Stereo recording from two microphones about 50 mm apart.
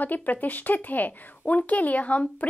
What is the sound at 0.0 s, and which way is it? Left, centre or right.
Speech, left.